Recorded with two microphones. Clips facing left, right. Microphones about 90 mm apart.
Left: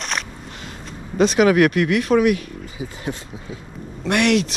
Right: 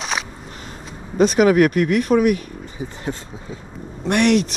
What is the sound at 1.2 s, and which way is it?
Speech, 40° right (ahead or behind).